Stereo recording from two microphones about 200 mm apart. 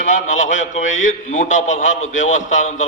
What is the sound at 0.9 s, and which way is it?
Speech, 75° left (ahead or behind).